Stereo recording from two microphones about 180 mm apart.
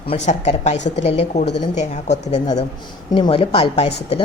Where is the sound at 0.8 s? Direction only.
80° left.